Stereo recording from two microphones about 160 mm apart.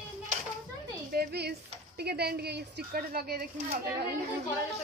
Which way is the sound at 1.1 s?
90° right.